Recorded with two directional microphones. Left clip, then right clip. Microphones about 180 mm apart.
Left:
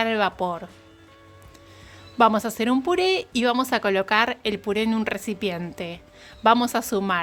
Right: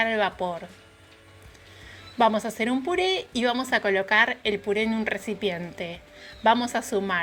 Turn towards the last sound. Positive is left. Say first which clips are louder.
# left 2 dB
turn(degrees=30)  # may be behind; listen again after turning